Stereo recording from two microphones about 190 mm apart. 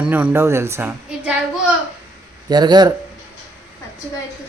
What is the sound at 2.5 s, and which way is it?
Speech, 20° right (ahead or behind).